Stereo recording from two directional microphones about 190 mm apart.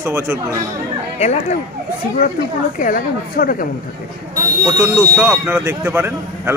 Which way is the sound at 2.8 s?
45° left (ahead or behind).